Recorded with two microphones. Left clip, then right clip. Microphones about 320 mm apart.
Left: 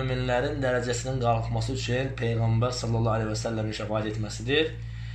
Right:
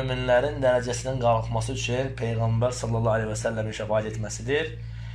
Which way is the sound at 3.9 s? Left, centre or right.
Centre.